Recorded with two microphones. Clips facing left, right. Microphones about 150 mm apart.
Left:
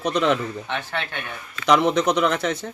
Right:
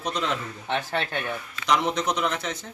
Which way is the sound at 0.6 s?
35° right (ahead or behind).